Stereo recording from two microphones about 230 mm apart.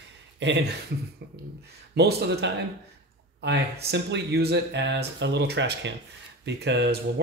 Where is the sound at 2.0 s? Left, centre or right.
Right.